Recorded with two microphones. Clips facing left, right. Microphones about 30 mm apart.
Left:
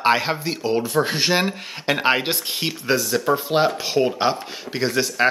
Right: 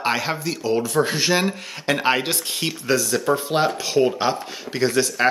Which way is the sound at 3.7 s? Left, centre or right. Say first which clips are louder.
Right 1 dB; left.